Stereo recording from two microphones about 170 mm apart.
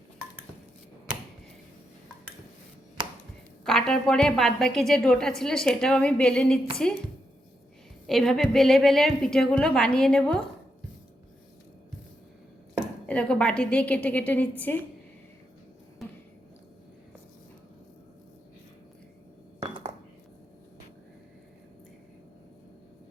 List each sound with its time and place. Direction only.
3.6 s a woman's voice: centre (ahead or behind)
8.0 s a woman's voice: centre (ahead or behind)
13.1 s a woman's voice: 5° left (ahead or behind)
19.6 s dishes: 35° right (ahead or behind)